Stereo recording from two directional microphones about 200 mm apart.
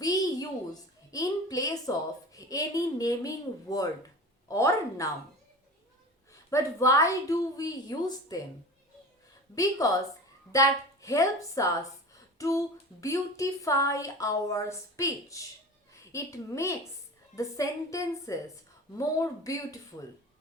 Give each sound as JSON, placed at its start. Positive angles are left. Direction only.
{"t": 0.0, "sound": "a woman's voice", "side_deg": 20}
{"t": 6.3, "sound": "speech", "side_deg": 15}
{"t": 9.6, "sound": "speech", "side_deg": 15}
{"t": 12.4, "sound": "a sound", "side_deg": 15}
{"t": 13.0, "sound": "speech", "side_deg": 15}